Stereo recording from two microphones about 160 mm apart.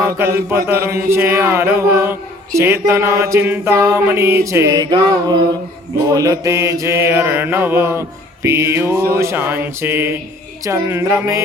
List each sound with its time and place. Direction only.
0.3 s mantra: 15° right (ahead or behind)